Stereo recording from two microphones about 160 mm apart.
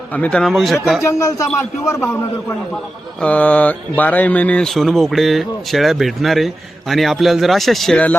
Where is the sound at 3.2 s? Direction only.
10° left (ahead or behind).